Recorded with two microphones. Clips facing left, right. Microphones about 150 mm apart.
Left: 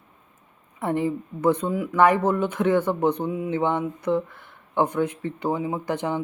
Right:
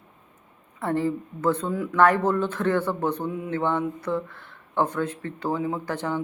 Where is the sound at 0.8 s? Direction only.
15° left (ahead or behind).